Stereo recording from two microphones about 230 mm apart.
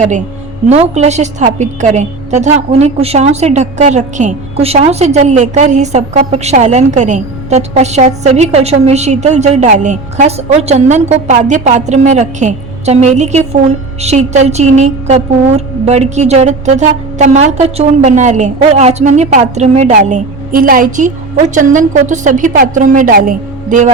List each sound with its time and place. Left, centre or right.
0.7 s a woman's voice: right